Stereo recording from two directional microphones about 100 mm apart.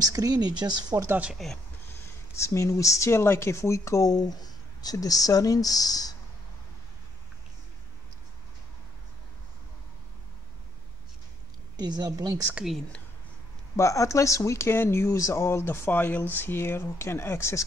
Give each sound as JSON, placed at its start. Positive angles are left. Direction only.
{"t": 0.0, "sound": "speech", "side_deg": -40}
{"t": 1.2, "sound": "speech", "side_deg": 0}
{"t": 1.9, "sound": "speech", "side_deg": 25}
{"t": 11.7, "sound": "speech", "side_deg": -45}
{"t": 12.5, "sound": "speech", "side_deg": 0}
{"t": 13.7, "sound": "speech", "side_deg": 30}